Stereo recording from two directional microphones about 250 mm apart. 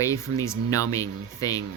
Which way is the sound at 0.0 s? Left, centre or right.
Centre.